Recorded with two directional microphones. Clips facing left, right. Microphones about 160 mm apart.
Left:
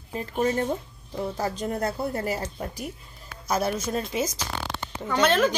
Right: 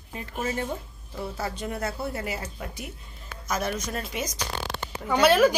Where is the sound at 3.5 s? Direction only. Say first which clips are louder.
Left 3 dB; 30° left (ahead or behind).